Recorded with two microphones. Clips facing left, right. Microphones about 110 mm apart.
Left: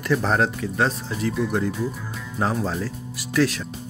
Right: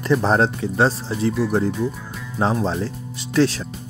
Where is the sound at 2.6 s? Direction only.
25° right (ahead or behind).